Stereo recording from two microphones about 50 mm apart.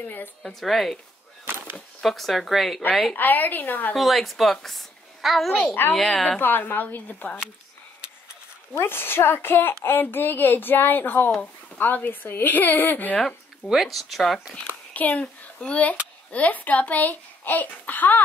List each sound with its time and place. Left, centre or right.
0.4 s speech: centre
2.0 s speech: centre
2.8 s speech: left
3.9 s a woman's voice: centre
6.4 s speech: left
8.7 s a woman's voice: left
13.7 s speech: centre
15.0 s speech: left